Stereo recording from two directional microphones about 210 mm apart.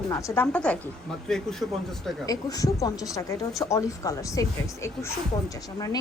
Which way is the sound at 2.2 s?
15° left (ahead or behind).